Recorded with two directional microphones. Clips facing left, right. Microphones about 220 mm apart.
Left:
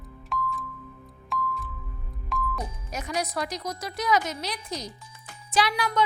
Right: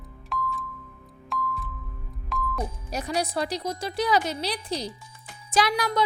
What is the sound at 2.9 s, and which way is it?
A woman's voice, 35° right (ahead or behind).